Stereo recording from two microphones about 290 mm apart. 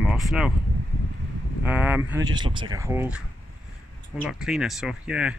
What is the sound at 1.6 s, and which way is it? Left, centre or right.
Speech, centre.